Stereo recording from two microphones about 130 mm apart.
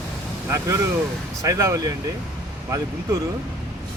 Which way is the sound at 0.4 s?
25° right (ahead or behind).